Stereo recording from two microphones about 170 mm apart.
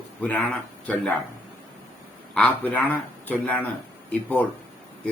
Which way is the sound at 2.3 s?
10° left (ahead or behind).